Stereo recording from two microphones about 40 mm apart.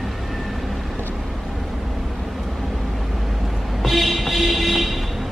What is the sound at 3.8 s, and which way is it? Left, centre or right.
Music, centre.